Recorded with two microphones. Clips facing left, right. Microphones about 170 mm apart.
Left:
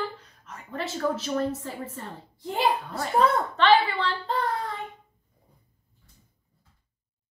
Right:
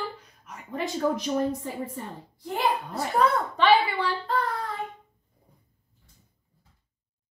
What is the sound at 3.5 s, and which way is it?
Speech, 10° right (ahead or behind).